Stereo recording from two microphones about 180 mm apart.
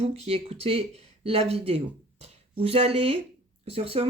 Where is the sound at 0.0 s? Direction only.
35° right (ahead or behind).